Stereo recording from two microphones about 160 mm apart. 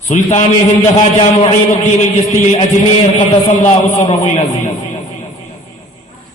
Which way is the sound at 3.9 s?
50° left (ahead or behind).